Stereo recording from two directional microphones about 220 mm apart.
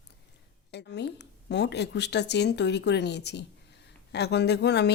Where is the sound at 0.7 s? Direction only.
50° left (ahead or behind).